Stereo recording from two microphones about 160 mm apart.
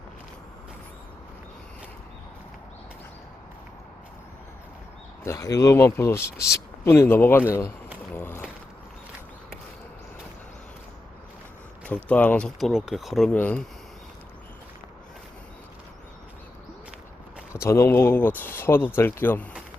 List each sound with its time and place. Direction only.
5.2 s speech: 20° left (ahead or behind)
8.1 s a sound: 15° left (ahead or behind)
11.9 s speech: 10° left (ahead or behind)
13.3 s speech: 10° left (ahead or behind)
17.5 s speech: 15° left (ahead or behind)